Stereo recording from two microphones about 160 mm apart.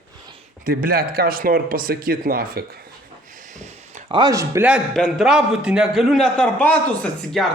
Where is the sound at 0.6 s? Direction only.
70° right (ahead or behind).